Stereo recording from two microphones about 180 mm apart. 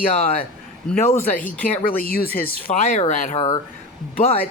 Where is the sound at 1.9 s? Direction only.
55° left (ahead or behind).